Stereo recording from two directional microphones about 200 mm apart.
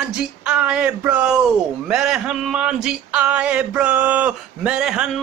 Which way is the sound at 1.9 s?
5° right (ahead or behind).